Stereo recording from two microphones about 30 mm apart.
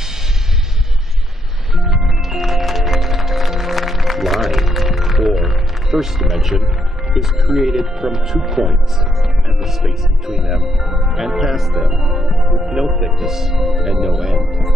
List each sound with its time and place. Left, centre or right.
1.8 s music: centre
7.2 s speech: centre